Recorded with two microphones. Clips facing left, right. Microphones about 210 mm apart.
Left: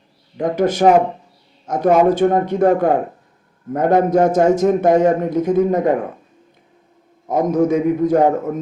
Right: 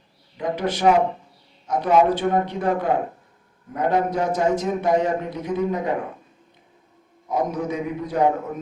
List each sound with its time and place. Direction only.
0.3 s a man's voice: 45° left (ahead or behind)
7.3 s a man's voice: 45° left (ahead or behind)